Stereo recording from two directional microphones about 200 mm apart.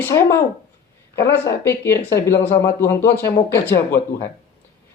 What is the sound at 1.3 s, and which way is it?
Speech, 15° left (ahead or behind).